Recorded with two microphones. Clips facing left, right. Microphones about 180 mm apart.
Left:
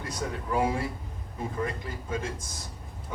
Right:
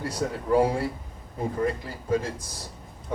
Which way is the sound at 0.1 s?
35° right (ahead or behind).